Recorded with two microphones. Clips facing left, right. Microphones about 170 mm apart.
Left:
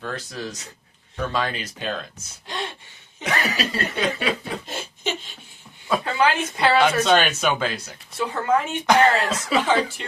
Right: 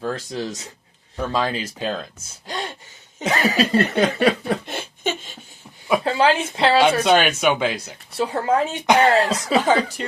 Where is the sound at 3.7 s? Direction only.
45° right (ahead or behind).